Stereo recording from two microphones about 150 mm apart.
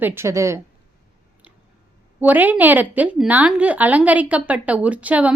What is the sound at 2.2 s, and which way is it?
A woman's voice, 10° right (ahead or behind).